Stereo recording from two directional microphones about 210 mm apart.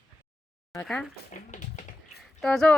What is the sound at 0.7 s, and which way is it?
Speech, 5° left (ahead or behind).